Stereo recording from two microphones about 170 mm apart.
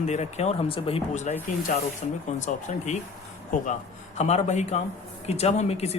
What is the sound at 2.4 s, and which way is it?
Speech, 45° left (ahead or behind).